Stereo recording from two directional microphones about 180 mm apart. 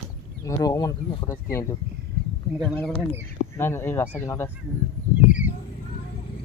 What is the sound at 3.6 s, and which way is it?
Speech, 15° left (ahead or behind).